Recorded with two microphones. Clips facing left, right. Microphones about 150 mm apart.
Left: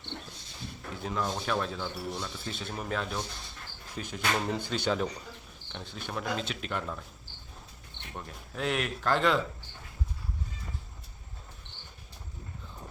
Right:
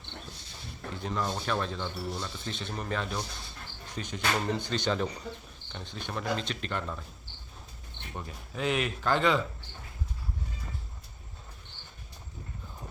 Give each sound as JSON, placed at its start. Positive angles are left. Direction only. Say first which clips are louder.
{"t": 0.9, "sound": "speech", "louder": "even", "side_deg": 5}
{"t": 8.1, "sound": "speech", "louder": "right 1 dB", "side_deg": 0}